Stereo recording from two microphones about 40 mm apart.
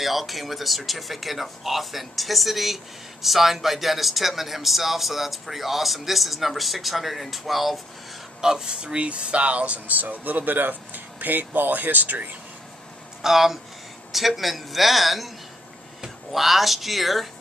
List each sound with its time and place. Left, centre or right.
0.0 s speech: centre
8.4 s speech: centre; by 12.3 s right
13.2 s speech: centre